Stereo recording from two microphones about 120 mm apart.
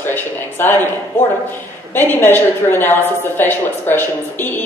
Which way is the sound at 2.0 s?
20° left (ahead or behind).